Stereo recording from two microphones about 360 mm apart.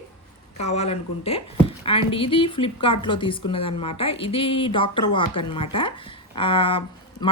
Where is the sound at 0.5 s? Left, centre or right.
Centre.